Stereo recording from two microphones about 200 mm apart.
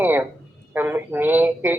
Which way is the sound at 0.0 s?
10° right (ahead or behind).